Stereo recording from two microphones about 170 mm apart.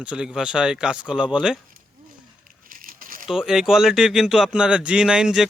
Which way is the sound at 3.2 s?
5° right (ahead or behind).